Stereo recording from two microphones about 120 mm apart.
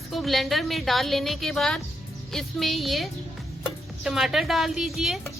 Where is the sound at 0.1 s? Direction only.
Centre (ahead or behind).